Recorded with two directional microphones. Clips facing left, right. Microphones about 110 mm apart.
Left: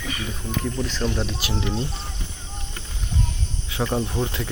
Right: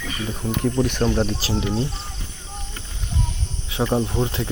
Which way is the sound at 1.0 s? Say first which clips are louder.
Right 3 dB; 35° right (ahead or behind).